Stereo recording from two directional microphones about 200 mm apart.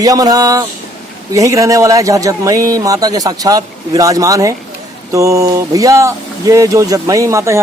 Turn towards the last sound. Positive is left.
turn(degrees=-15)  # may be behind; listen again after turning